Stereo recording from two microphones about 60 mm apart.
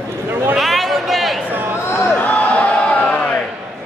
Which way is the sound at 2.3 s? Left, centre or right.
Left.